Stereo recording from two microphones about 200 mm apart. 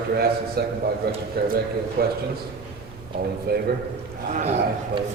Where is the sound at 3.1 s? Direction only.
50° right (ahead or behind).